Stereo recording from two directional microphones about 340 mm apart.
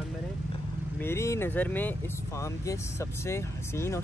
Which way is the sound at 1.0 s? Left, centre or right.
Centre.